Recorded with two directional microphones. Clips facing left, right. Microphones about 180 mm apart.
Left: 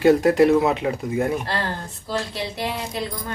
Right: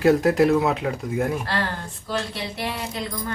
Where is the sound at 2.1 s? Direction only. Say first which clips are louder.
Left 1 dB; 25° left (ahead or behind).